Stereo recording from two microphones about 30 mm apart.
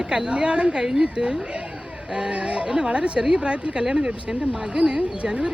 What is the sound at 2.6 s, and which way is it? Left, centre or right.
Speech, right.